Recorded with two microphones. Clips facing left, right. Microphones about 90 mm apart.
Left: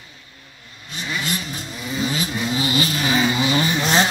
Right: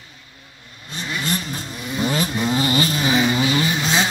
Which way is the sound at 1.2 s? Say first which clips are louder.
Right 2 dB; 40° right (ahead or behind).